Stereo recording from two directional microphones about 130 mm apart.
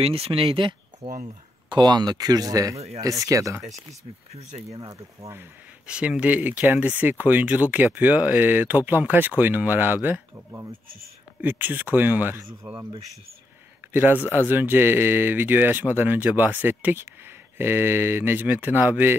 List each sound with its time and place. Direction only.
0.0 s speech: 50° right (ahead or behind)
1.0 s speech: 70° right (ahead or behind)
1.7 s speech: 35° right (ahead or behind)
4.3 s speech: 55° right (ahead or behind)
4.9 s speech: 20° right (ahead or behind)
12.6 s speech: 45° right (ahead or behind)
13.9 s speech: 15° right (ahead or behind)